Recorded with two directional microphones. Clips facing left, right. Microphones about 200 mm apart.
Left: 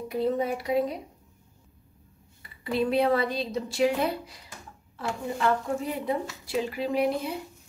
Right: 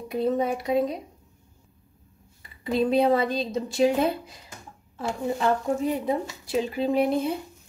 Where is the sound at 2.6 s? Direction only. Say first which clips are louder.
Right 3 dB; 20° right (ahead or behind).